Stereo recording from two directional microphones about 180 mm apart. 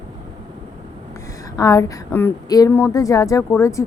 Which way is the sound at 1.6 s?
20° left (ahead or behind).